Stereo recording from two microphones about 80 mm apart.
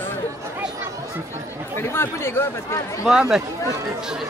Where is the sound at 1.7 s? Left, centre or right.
Left.